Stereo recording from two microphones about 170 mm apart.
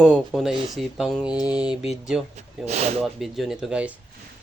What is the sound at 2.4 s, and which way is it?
Speech, 40° right (ahead or behind).